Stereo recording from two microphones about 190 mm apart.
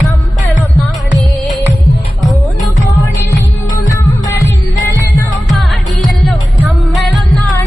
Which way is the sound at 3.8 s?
15° left (ahead or behind).